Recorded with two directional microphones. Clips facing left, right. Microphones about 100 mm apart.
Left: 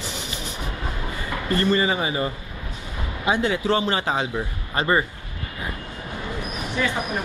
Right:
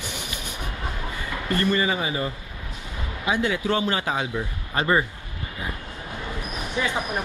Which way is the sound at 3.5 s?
20° left (ahead or behind).